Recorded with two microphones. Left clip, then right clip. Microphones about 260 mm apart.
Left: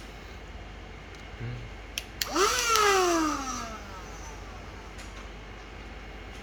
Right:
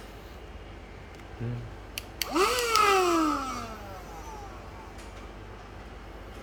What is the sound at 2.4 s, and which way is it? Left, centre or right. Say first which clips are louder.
Cat: even; centre.